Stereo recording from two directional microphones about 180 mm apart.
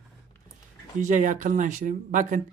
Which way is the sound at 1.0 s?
45° right (ahead or behind).